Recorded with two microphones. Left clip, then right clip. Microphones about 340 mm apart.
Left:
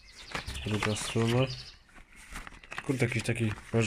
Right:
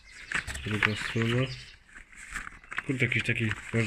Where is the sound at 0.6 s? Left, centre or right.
Centre.